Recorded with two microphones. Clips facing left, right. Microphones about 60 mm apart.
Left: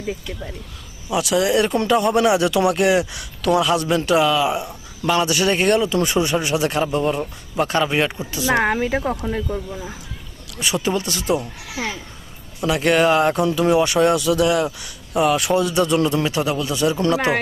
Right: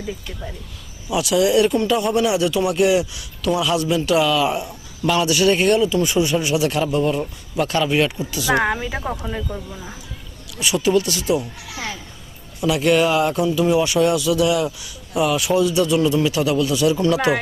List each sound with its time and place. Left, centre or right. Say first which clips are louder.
1.1 s speech: right 1 dB; left
1.7 s speech: left 1 dB; left
2.7 s speech: even; left
3.6 s a man's voice: left 1 dB; left; by 5.1 s centre
5.1 s speech: right 2 dB; left
5.8 s speech: right 1 dB; left
6.4 s a man's voice: right 1 dB; left
8.6 s speech: left 3 dB; left
10.8 s speech: right 5 dB; left
12.5 s speech: right 1 dB; left
16.2 s speech: right 3 dB; left